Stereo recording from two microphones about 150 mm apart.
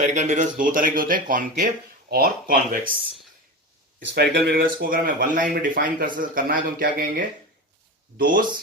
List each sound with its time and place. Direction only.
0.0 s speech: 50° right (ahead or behind)
2.0 s speech: 85° right
4.1 s speech: 90° right; by 8.4 s 70° right (ahead or behind)